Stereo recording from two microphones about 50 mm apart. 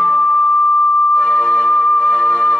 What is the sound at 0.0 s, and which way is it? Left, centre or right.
Music, left.